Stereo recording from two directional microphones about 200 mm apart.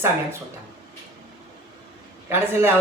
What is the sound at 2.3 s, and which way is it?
Speech, 10° right (ahead or behind).